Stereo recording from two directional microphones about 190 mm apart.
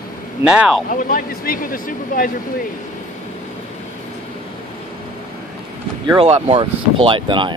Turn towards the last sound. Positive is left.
turn(degrees=-25)  # may be behind; listen again after turning